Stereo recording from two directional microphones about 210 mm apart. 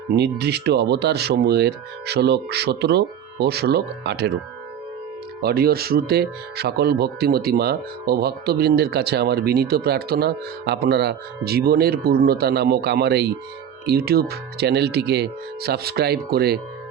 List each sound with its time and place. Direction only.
0.2 s speech: 50° right (ahead or behind)
5.4 s speech: 50° right (ahead or behind)